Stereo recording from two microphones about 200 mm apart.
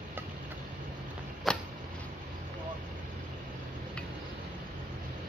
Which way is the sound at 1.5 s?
Centre (ahead or behind).